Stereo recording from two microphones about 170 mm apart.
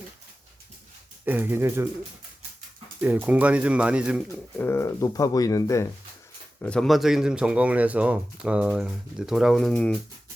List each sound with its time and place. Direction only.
1.2 s speech: 10° right (ahead or behind)
3.0 s speech: 10° right (ahead or behind)
4.5 s speech: 15° left (ahead or behind)
6.6 s speech: 5° left (ahead or behind)